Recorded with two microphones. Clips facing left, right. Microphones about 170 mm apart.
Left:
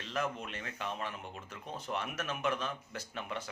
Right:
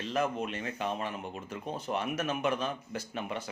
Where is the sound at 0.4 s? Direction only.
15° right (ahead or behind).